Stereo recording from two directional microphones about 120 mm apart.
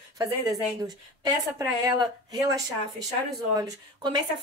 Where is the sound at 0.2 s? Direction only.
30° right (ahead or behind).